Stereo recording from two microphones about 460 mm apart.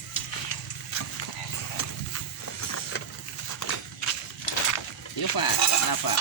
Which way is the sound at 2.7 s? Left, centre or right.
Left.